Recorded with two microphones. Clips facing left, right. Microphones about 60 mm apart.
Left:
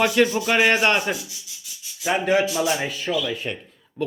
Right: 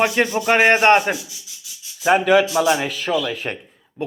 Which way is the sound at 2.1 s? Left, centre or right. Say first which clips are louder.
Right 5 dB; right.